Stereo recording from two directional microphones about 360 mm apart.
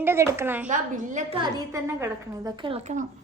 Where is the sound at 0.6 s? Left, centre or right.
Right.